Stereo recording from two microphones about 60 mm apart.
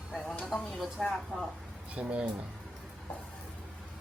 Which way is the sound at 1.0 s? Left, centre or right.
Centre.